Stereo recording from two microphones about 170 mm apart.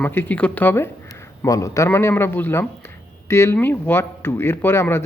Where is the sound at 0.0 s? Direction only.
10° left (ahead or behind).